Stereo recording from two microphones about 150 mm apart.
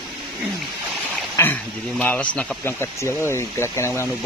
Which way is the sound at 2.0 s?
10° left (ahead or behind).